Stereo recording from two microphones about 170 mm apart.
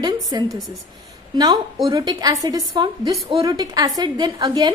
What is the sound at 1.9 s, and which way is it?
A woman's voice, 20° right (ahead or behind).